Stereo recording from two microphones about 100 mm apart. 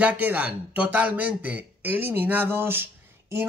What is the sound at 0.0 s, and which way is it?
Speech, 15° right (ahead or behind).